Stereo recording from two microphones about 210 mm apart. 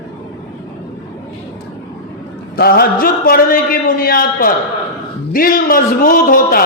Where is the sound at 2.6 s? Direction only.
45° left (ahead or behind).